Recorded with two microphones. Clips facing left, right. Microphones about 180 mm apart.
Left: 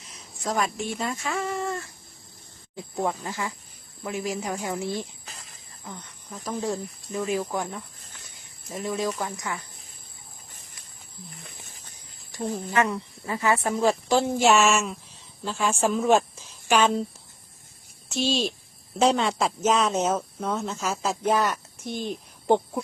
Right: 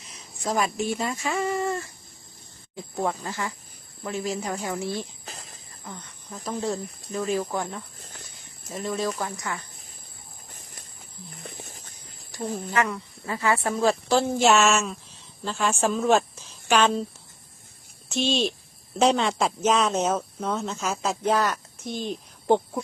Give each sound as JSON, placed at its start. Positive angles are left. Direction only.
{"t": 0.2, "sound": "speech", "side_deg": -5}
{"t": 3.1, "sound": "speech", "side_deg": 15}
{"t": 5.2, "sound": "a sound", "side_deg": -35}
{"t": 6.3, "sound": "speech", "side_deg": 0}
{"t": 6.7, "sound": "speech", "side_deg": 10}
{"t": 7.9, "sound": "snake", "side_deg": -40}
{"t": 8.8, "sound": "speech", "side_deg": 10}
{"t": 11.3, "sound": "a sound", "side_deg": -40}
{"t": 12.4, "sound": "a woman's voice", "side_deg": 25}
{"t": 18.1, "sound": "speech", "side_deg": 0}
{"t": 22.0, "sound": "hoot", "side_deg": 15}